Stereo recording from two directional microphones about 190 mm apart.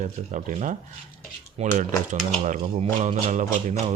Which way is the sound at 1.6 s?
30° right (ahead or behind).